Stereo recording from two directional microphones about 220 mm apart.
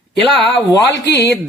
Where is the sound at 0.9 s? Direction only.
50° left (ahead or behind).